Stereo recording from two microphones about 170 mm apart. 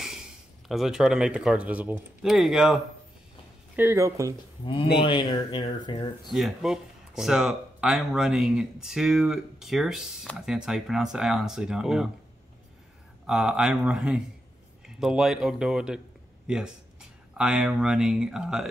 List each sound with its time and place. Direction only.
0.7 s speech: centre (ahead or behind)
3.7 s speech: 15° right (ahead or behind)
4.6 s speech: 30° left (ahead or behind)
6.3 s speech: centre (ahead or behind)
13.3 s speech: 5° right (ahead or behind)